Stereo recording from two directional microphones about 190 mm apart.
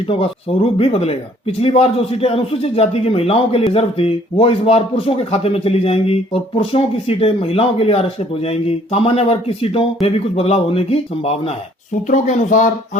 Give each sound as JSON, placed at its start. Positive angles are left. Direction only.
{"t": 0.1, "sound": "speech", "side_deg": 30}